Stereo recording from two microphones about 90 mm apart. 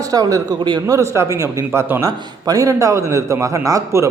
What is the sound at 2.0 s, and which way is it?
A man's voice, 40° right (ahead or behind).